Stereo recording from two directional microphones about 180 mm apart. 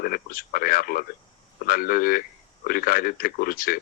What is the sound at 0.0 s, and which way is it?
Speech, 55° left (ahead or behind).